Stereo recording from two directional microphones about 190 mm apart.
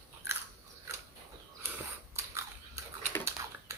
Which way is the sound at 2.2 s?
15° right (ahead or behind).